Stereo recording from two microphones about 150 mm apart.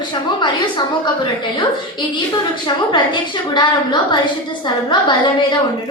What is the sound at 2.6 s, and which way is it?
A woman's voice, 30° left (ahead or behind).